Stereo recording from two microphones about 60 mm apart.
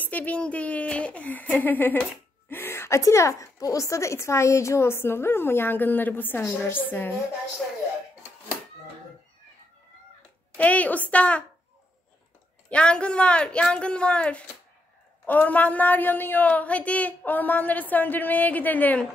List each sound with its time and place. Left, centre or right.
0.0 s a woman's voice: left
10.6 s a woman's voice: left
12.6 s a woman's voice: centre